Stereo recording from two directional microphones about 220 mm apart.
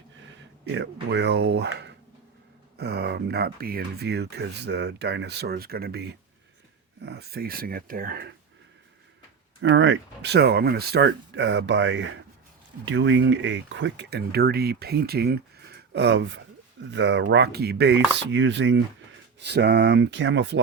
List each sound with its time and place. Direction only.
0.7 s speech: 50° right (ahead or behind)
9.6 s speech: 55° right (ahead or behind)